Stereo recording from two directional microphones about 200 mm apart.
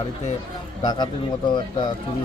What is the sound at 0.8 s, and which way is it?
Speech, 20° left (ahead or behind).